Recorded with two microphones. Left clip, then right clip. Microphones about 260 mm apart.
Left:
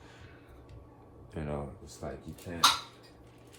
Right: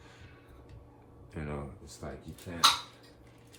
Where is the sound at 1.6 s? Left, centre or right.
Centre.